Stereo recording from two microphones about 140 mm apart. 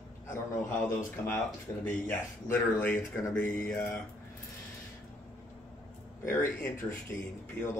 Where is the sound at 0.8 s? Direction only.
10° left (ahead or behind).